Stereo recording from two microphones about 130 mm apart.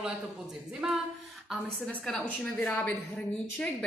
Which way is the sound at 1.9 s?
5° left (ahead or behind).